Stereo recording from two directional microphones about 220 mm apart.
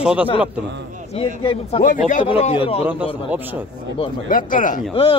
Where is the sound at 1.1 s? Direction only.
25° left (ahead or behind).